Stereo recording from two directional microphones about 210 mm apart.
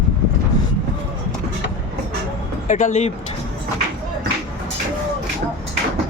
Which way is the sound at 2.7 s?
35° left (ahead or behind).